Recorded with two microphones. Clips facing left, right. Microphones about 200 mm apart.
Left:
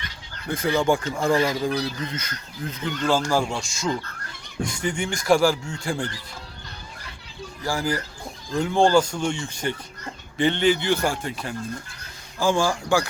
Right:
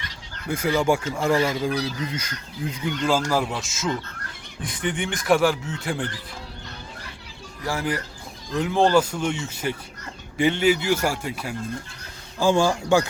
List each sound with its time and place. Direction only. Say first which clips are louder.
0.4 s speech: even; 10° right (ahead or behind)
7.6 s speech: left 1 dB; centre (ahead or behind)
12.4 s speech: right 2 dB; 20° right (ahead or behind)